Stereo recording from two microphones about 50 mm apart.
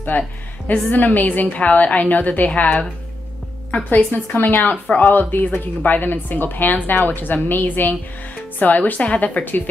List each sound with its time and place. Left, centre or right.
0.1 s a woman's voice: left